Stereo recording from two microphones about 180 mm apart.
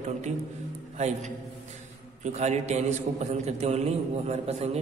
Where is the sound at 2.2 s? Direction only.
40° right (ahead or behind).